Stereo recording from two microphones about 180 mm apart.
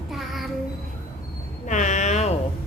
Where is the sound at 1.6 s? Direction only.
45° left (ahead or behind).